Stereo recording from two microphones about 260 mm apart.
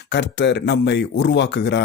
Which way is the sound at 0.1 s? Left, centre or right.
Left.